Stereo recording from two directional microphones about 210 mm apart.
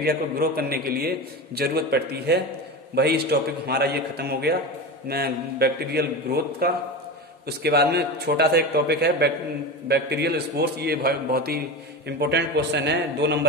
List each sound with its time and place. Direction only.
0.0 s a man's voice: 45° right (ahead or behind)